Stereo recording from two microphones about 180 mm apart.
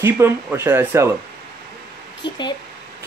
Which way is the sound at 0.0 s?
15° right (ahead or behind).